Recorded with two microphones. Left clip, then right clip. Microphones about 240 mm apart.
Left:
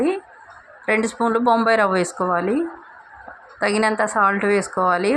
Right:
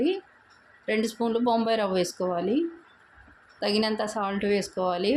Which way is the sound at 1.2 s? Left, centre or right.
Centre.